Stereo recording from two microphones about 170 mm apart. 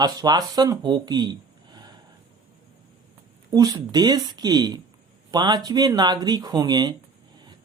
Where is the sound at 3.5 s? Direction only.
20° right (ahead or behind).